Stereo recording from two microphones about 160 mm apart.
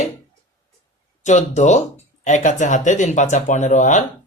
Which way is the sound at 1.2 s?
45° left (ahead or behind).